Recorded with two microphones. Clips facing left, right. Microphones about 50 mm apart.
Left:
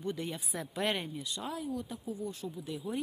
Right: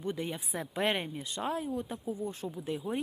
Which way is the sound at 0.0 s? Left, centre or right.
Right.